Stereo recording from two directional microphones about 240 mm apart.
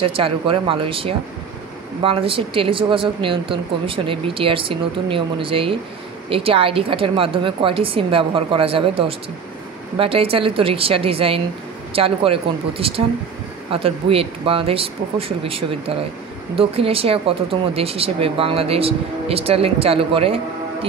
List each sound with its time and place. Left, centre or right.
0.0 s speech: right